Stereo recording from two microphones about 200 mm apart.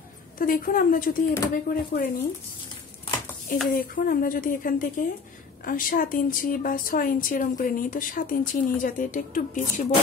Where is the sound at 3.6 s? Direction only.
45° left (ahead or behind).